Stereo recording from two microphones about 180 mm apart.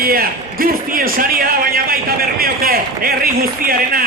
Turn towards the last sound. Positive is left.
turn(degrees=-55)  # may be behind; listen again after turning